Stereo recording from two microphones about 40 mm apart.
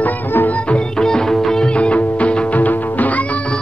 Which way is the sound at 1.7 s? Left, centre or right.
Left.